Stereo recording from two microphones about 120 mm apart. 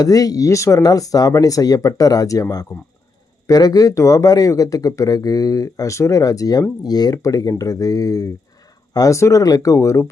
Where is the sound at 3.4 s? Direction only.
30° left (ahead or behind).